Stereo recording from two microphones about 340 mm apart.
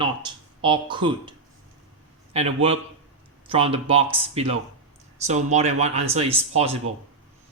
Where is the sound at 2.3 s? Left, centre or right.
Centre.